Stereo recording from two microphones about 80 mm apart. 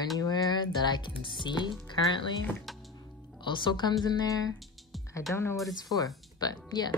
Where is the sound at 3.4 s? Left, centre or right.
Left.